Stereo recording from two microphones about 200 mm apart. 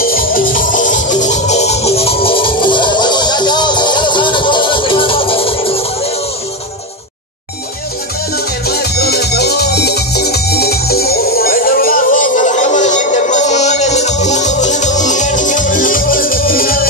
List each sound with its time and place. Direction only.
0.0 s music: 45° left (ahead or behind); by 5.9 s 30° left (ahead or behind)
8.6 s music: 50° left (ahead or behind)